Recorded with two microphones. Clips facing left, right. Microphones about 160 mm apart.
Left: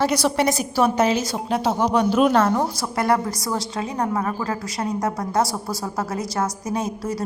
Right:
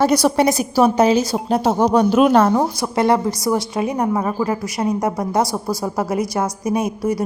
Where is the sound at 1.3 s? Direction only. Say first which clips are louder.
Right 5 dB; 45° right (ahead or behind).